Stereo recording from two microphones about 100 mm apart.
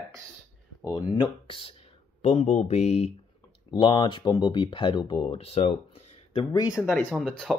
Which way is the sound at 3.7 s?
50° left (ahead or behind).